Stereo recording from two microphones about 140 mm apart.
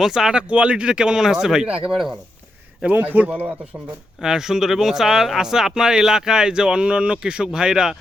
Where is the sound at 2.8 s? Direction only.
10° right (ahead or behind).